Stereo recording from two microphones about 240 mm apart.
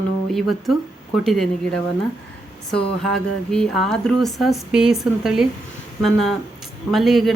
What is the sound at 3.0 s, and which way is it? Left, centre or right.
Speech, centre.